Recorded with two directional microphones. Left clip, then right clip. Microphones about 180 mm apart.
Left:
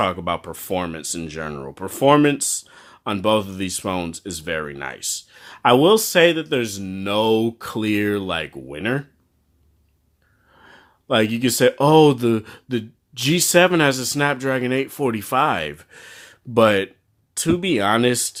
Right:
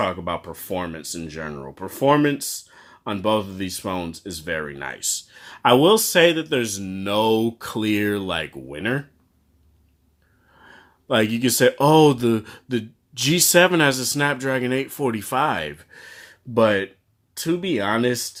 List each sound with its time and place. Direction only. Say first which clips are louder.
0.0 s speech: left 3 dB; 25° left (ahead or behind)
10.6 s speech: even; 15° left (ahead or behind)